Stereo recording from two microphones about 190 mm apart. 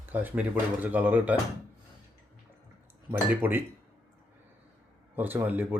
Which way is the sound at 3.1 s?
10° right (ahead or behind).